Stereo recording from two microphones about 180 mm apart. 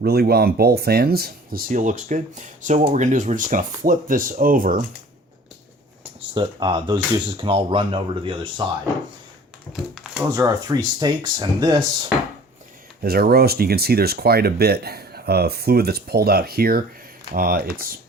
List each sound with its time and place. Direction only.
0.0 s speech: 60° right (ahead or behind)
6.1 s speech: 25° right (ahead or behind)
9.9 s a sound: centre (ahead or behind)
10.3 s speech: 20° right (ahead or behind)
13.0 s speech: 55° right (ahead or behind)